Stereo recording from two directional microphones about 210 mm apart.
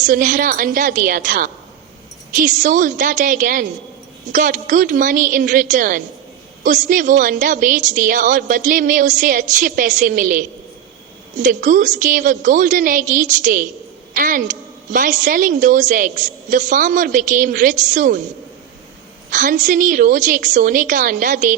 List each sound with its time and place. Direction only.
0.0 s a woman's voice: 40° right (ahead or behind)
19.3 s a woman's voice: 40° right (ahead or behind)